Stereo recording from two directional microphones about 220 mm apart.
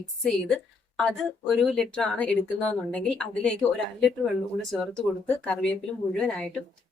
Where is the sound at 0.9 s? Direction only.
Centre (ahead or behind).